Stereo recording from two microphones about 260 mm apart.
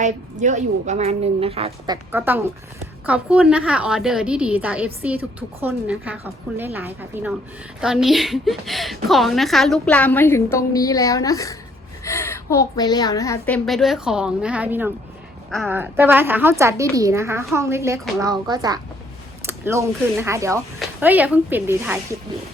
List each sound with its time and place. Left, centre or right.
0.0 s a woman's voice: right
2.1 s a woman's voice: centre